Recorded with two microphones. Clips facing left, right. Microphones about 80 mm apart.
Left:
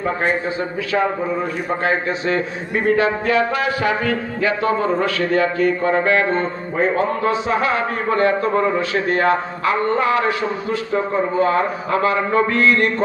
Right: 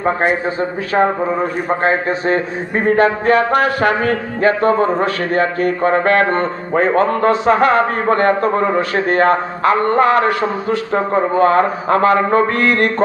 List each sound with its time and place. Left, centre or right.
0.6 s speech: right